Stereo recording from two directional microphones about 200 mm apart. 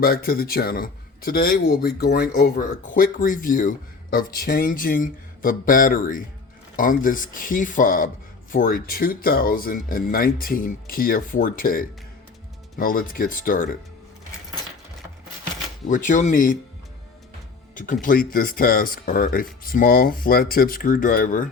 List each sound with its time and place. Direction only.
0.0 s a man's voice: 50° left (ahead or behind)
15.9 s speech: 40° left (ahead or behind)
17.7 s a man's voice: 40° left (ahead or behind)